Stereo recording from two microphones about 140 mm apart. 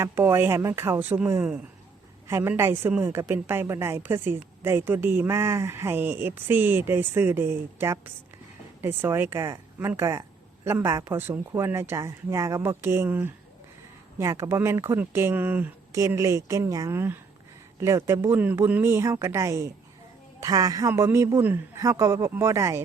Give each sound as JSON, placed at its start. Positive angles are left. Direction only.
{"t": 0.0, "sound": "a woman's voice", "side_deg": -20}